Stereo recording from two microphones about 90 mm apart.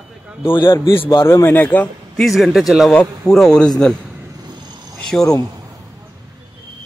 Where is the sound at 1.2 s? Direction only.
35° left (ahead or behind).